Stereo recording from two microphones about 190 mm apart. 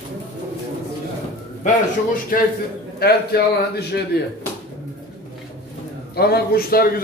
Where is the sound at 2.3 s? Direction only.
50° left (ahead or behind).